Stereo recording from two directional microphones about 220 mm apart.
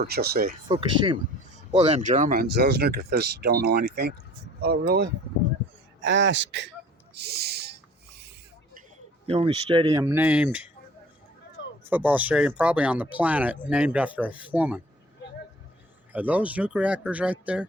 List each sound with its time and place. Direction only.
0.0 s speech: 45° right (ahead or behind)
0.7 s a man's voice: 25° right (ahead or behind); by 6.7 s 55° right (ahead or behind)
7.1 s a sound: 45° right (ahead or behind)
9.2 s speech: 25° right (ahead or behind)
10.0 s speech: 10° right (ahead or behind)
11.9 s speech: 10° right (ahead or behind)
16.1 s speech: 5° right (ahead or behind)